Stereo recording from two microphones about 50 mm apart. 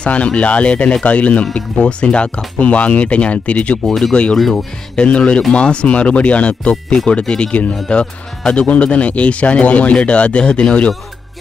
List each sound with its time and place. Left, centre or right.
0.0 s speech: left